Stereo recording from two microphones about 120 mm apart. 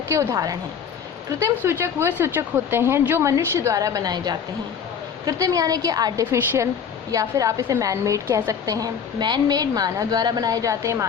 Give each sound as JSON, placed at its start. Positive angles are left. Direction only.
{"t": 0.1, "sound": "a woman's voice", "side_deg": -25}